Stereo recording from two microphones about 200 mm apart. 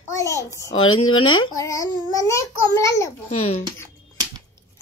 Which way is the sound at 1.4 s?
15° left (ahead or behind).